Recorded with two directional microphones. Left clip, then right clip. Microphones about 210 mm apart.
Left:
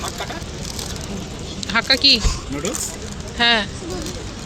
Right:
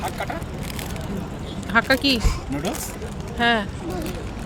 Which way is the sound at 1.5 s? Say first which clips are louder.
Left 1 dB; 10° right (ahead or behind).